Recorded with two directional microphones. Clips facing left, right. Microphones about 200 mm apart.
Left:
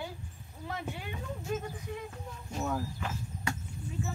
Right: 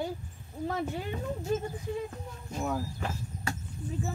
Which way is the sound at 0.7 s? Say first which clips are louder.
Right 6 dB; 40° right (ahead or behind).